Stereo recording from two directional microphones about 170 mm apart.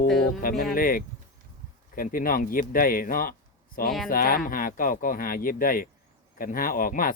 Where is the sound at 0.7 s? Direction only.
55° left (ahead or behind).